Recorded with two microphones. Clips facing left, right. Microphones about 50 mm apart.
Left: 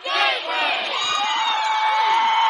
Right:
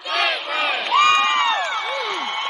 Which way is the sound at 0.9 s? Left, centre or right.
Right.